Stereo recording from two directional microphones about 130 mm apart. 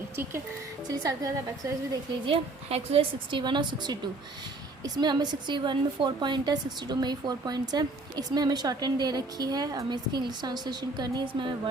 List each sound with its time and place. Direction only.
0.9 s a woman's voice: 30° right (ahead or behind)
2.2 s a woman's voice: 50° right (ahead or behind)